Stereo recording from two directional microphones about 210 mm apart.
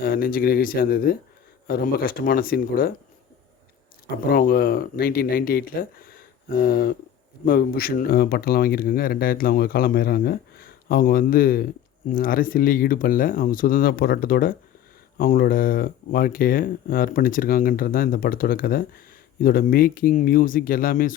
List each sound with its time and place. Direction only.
0.0 s speech: 45° left (ahead or behind)
4.0 s speech: 45° left (ahead or behind)